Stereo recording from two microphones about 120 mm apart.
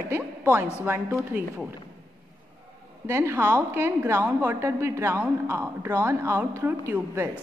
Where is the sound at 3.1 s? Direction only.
20° right (ahead or behind).